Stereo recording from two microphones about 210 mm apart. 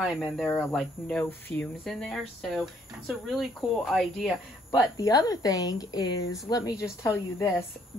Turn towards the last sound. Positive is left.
turn(degrees=15)  # may be behind; listen again after turning